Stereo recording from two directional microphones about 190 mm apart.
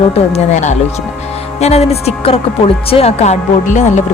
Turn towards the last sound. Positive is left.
turn(degrees=40)  # may be behind; listen again after turning